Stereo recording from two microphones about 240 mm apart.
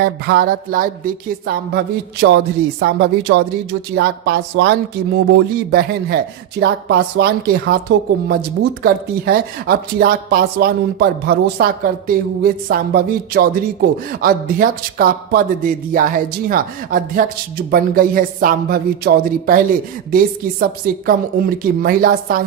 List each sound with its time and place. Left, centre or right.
0.0 s speech: right
2.8 s a woman's voice: right